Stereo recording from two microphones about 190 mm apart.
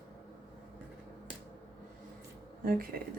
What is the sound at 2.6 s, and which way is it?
Speech, 50° right (ahead or behind).